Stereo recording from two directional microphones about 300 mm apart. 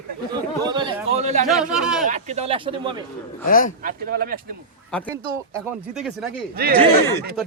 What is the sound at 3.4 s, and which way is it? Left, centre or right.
Speech, left.